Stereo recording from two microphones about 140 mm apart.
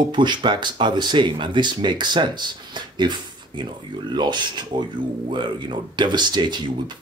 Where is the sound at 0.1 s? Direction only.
35° right (ahead or behind).